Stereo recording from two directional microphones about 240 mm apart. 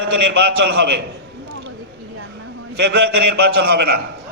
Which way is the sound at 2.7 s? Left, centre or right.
Right.